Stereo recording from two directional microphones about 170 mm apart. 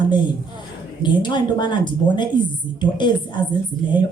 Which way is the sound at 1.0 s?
25° left (ahead or behind).